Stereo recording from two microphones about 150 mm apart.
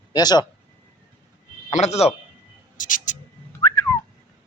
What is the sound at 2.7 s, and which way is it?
Cat, 60° left (ahead or behind).